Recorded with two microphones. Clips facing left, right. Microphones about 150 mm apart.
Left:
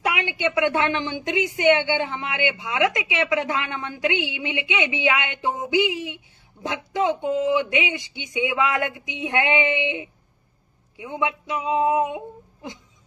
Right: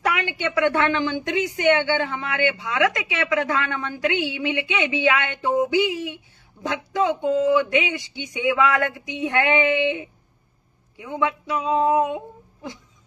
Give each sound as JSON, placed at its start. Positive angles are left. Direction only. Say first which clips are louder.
{"t": 0.0, "sound": "a woman's voice", "louder": "even", "side_deg": 20}